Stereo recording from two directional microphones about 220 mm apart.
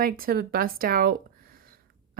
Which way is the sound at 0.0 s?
40° right (ahead or behind).